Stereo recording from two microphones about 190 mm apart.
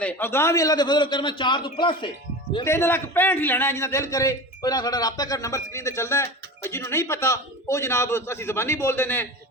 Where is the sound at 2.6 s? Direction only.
15° left (ahead or behind).